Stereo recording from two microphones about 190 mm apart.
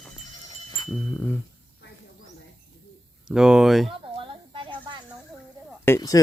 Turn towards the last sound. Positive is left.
turn(degrees=15)  # may be behind; listen again after turning